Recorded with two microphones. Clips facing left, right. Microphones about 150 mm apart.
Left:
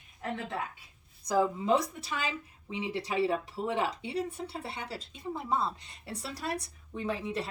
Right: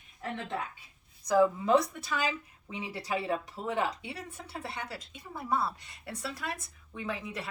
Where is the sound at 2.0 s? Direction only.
25° left (ahead or behind).